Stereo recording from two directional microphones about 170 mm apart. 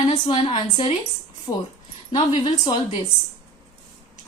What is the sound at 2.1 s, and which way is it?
Speech, 30° left (ahead or behind).